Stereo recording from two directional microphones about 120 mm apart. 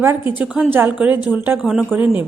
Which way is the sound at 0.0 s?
20° right (ahead or behind).